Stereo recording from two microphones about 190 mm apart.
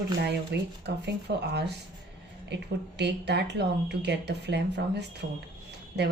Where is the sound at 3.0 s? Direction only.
65° right (ahead or behind).